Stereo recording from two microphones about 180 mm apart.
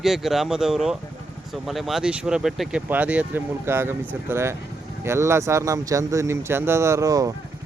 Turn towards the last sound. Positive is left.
turn(degrees=-20)  # may be behind; listen again after turning